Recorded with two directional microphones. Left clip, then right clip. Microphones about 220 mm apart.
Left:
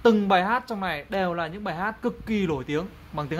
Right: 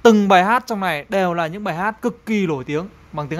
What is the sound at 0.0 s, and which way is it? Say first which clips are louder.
Speech: right 8 dB; 30° right (ahead or behind).